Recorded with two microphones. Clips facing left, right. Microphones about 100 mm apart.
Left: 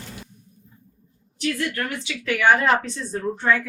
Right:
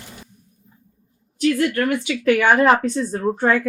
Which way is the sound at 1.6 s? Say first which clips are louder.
Right 8 dB; 55° right (ahead or behind).